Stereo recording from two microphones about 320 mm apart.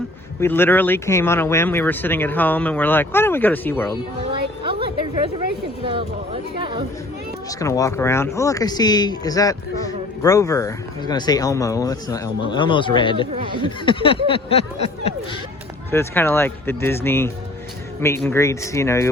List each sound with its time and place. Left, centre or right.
0.3 s speech: centre
4.3 s a sound: centre
6.6 s chatter: centre
7.6 s speech: centre
13.3 s speech: centre
13.6 s speech: centre
15.9 s speech: centre